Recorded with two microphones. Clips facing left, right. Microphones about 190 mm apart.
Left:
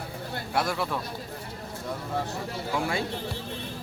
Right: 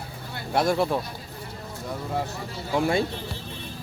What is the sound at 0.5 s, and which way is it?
Speech, 35° right (ahead or behind).